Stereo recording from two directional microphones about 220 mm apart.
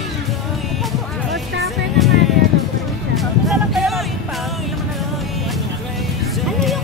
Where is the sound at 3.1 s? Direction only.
Centre (ahead or behind).